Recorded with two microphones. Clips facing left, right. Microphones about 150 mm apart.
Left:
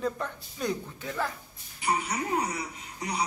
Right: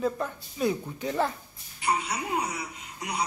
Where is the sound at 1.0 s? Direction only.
25° right (ahead or behind).